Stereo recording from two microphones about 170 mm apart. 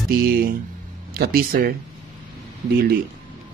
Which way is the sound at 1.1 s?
60° right (ahead or behind).